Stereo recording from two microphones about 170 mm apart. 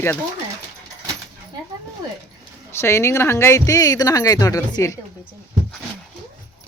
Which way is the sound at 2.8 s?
15° left (ahead or behind).